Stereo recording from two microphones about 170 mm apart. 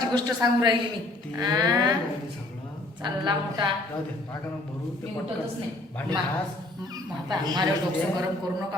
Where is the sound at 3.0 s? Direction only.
25° right (ahead or behind).